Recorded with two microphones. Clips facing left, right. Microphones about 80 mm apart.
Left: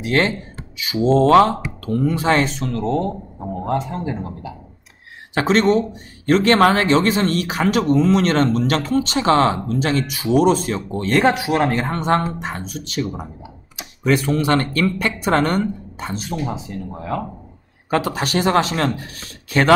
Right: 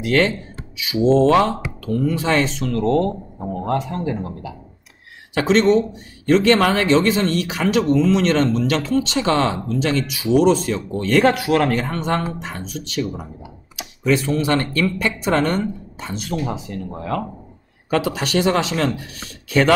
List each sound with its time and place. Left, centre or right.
0.0 s speech: left
0.9 s speech: left
2.6 s speech: left
5.3 s speech: left
11.2 s speech: left
11.8 s speech: left
13.0 s speech: centre
14.0 s speech: left
16.5 s speech: centre
17.8 s speech: left